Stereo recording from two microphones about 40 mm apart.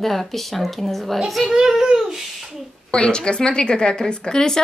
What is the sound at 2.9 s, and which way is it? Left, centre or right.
A woman's voice, left.